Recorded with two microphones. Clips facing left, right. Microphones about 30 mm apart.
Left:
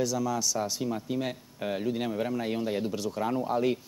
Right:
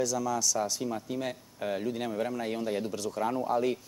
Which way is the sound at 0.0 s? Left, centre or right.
Centre.